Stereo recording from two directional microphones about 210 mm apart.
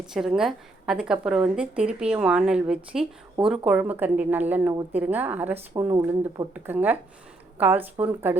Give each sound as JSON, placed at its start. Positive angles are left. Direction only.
{"t": 0.0, "sound": "a woman's voice", "side_deg": 0}